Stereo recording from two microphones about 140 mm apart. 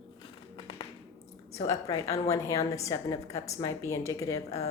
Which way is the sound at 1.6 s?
25° left (ahead or behind).